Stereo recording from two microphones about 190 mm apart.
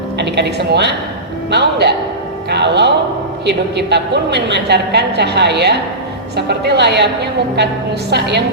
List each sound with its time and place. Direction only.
0.2 s a woman's voice: 65° right (ahead or behind)
8.1 s a woman's voice: 60° right (ahead or behind)